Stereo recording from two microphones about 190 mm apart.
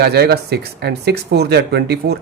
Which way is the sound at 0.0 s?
60° right (ahead or behind).